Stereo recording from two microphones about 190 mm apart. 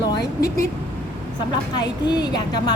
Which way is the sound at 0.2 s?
55° left (ahead or behind).